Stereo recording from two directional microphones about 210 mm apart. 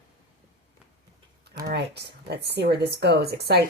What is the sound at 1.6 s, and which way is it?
Speech, 50° right (ahead or behind).